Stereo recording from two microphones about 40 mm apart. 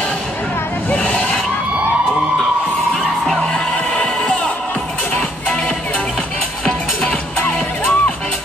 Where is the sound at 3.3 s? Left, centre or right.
Centre.